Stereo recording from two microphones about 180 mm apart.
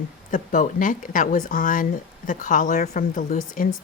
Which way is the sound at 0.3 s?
45° left (ahead or behind).